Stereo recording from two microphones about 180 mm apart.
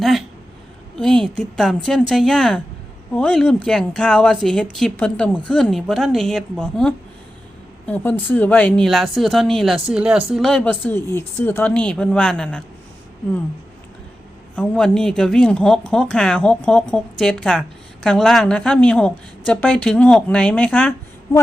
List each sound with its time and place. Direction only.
0.0 s speech: centre (ahead or behind)
0.9 s a sound: 5° left (ahead or behind)
1.5 s a woman's voice: centre (ahead or behind)
14.5 s a woman's voice: 5° left (ahead or behind)